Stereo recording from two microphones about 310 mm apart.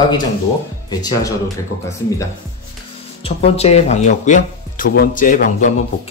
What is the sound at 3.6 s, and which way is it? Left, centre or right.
Speech, left.